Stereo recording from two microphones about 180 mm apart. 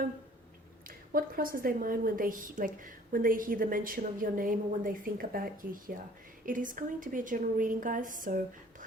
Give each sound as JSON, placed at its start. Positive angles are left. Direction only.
{"t": 0.9, "sound": "a woman's voice", "side_deg": -55}